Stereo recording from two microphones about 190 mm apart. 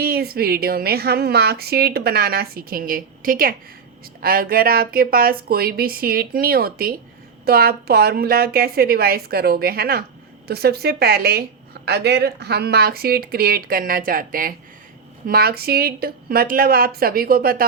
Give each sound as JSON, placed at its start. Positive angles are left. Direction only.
{"t": 0.0, "sound": "a woman's voice", "side_deg": -55}